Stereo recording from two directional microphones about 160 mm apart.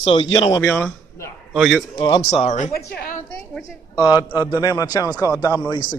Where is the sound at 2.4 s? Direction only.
50° left (ahead or behind).